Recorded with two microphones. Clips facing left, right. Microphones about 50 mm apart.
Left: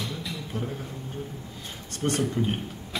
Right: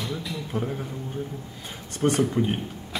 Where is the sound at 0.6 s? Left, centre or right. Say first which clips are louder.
Right 4 dB; centre.